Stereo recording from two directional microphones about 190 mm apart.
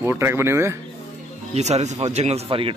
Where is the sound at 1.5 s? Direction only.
35° right (ahead or behind).